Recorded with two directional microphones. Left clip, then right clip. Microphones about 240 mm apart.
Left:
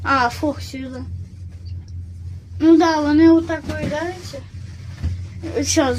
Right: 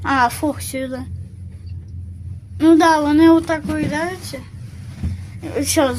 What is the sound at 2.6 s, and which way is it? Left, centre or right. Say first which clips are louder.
Speech: right 2 dB; centre.